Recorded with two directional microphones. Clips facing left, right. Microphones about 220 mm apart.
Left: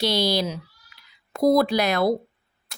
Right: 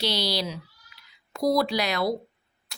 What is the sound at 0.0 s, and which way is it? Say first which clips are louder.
Speech: left 5 dB; 50° left (ahead or behind).